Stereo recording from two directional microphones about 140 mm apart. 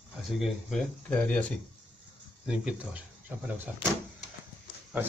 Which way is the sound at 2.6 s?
10° right (ahead or behind).